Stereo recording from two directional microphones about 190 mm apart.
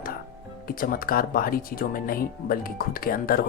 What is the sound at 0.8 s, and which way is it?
Speech, 50° left (ahead or behind).